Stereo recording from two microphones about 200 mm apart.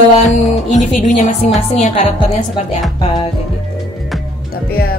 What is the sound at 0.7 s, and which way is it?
Speech, 35° left (ahead or behind).